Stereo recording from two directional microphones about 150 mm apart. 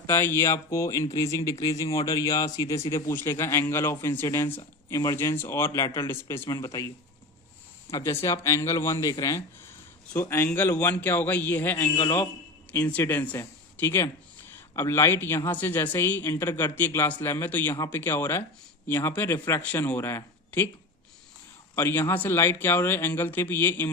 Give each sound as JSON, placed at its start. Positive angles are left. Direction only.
{"t": 0.1, "sound": "a man's voice", "side_deg": 15}
{"t": 21.8, "sound": "speech", "side_deg": 15}